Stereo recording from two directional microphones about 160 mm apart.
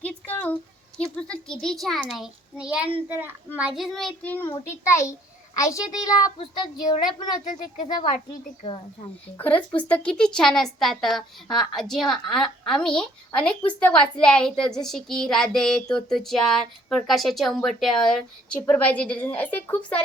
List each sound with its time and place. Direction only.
0.0 s a sound: 10° left (ahead or behind)
3.1 s a child's voice: 15° right (ahead or behind); by 6.3 s 20° left (ahead or behind)
7.4 s speech: 50° left (ahead or behind)
9.4 s a woman's voice: 10° left (ahead or behind)